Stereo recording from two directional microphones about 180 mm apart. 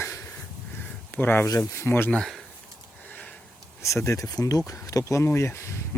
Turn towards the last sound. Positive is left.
turn(degrees=15)  # may be behind; listen again after turning